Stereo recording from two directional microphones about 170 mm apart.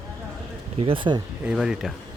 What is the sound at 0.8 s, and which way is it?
Speech, 30° right (ahead or behind).